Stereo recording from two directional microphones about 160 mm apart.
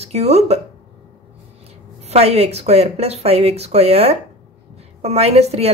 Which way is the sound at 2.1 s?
40° right (ahead or behind).